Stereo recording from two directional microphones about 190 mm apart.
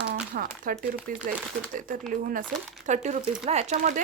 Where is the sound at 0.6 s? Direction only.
45° right (ahead or behind).